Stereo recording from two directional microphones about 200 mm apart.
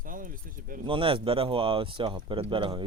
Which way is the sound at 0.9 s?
25° right (ahead or behind).